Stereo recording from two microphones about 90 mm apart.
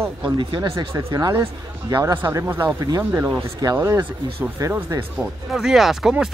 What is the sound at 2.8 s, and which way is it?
Speech, 40° right (ahead or behind).